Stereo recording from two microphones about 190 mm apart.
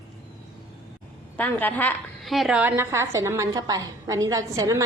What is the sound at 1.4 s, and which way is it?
A woman's voice, 10° left (ahead or behind).